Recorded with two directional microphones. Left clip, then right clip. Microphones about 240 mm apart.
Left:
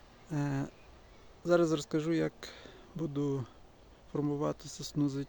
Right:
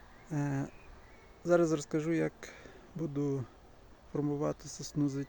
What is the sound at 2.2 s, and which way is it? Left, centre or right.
Speech, centre.